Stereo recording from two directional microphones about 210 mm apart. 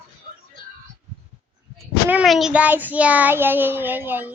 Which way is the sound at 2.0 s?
5° right (ahead or behind).